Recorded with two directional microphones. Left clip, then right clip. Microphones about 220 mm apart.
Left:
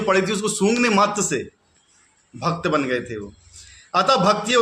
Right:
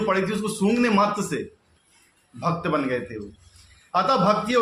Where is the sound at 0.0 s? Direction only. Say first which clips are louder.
Left 4 dB; 50° left (ahead or behind).